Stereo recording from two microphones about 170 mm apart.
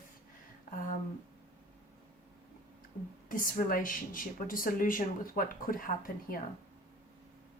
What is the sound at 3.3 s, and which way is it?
Speech, 55° left (ahead or behind).